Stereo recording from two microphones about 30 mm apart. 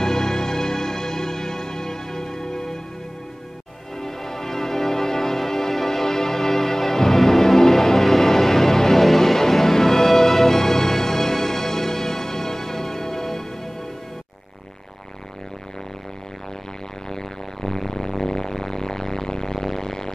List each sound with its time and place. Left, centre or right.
0.0 s music: centre
4.0 s music: centre
17.1 s music: centre